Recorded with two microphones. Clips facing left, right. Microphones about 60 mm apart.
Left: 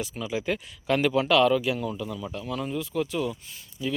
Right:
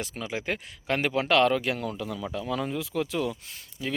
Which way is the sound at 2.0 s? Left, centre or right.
Right.